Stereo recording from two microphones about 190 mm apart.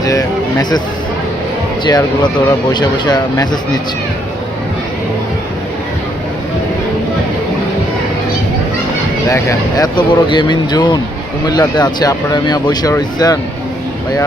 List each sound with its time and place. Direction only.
0.0 s speech: 20° left (ahead or behind)
1.8 s speech: 20° left (ahead or behind)
9.3 s speech: 20° left (ahead or behind)